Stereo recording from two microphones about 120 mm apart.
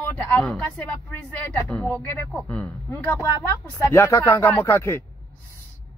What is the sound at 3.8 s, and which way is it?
Speech, 20° left (ahead or behind).